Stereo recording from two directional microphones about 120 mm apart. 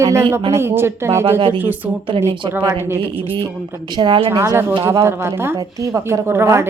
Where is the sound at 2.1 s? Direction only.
60° right (ahead or behind).